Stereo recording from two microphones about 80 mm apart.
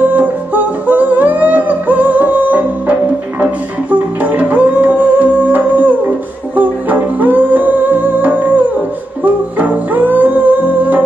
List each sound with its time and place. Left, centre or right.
0.0 s music: right